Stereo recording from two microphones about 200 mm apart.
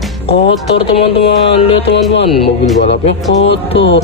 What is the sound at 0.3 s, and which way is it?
Speech, 30° left (ahead or behind).